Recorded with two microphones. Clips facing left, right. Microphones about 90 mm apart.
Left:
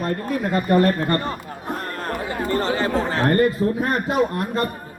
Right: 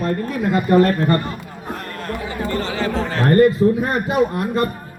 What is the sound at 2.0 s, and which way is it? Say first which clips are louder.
Speech: even; 40° left (ahead or behind).